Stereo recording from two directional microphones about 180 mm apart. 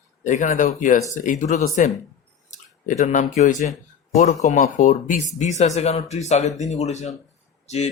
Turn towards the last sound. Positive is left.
turn(degrees=40)  # may be behind; listen again after turning